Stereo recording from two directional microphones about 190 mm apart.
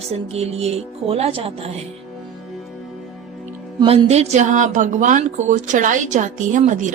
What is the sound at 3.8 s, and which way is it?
Music, 35° right (ahead or behind).